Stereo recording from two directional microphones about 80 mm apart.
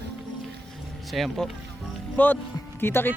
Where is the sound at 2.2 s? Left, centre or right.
Centre.